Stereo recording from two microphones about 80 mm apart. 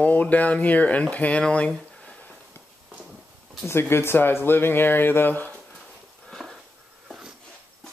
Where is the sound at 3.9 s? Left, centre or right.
Left.